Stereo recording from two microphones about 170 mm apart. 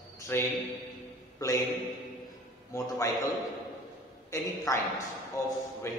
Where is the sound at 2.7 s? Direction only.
20° left (ahead or behind).